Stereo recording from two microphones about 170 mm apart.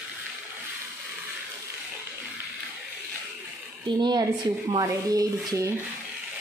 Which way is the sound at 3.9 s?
25° right (ahead or behind).